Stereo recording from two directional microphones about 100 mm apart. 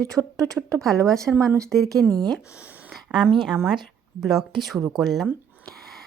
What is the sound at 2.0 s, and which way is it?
Speech, 10° left (ahead or behind).